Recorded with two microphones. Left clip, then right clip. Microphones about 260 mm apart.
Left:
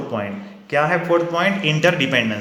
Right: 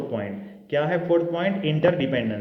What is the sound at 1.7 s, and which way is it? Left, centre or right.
Speech, centre.